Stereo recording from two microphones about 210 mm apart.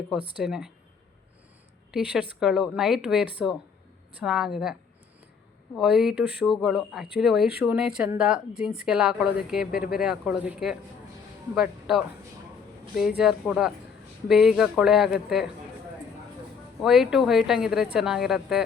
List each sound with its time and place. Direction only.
0.1 s speech: 5° right (ahead or behind)
1.9 s a woman's voice: 5° right (ahead or behind)
16.8 s speech: centre (ahead or behind)